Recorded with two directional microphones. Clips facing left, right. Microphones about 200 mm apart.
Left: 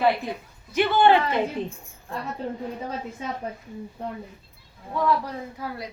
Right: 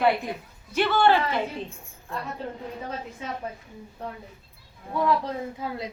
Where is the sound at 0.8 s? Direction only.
15° left (ahead or behind).